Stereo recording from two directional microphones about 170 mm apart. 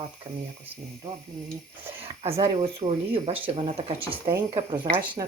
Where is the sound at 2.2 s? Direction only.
30° right (ahead or behind).